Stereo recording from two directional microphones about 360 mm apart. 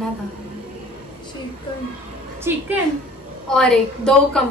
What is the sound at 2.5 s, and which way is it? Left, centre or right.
A woman's voice, centre.